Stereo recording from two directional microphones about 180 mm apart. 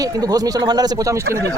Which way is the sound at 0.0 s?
20° right (ahead or behind).